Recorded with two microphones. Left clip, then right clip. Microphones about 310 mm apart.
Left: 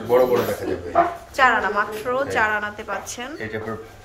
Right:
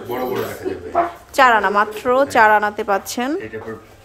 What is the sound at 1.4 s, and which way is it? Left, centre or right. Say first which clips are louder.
A woman's voice: right 5 dB; right.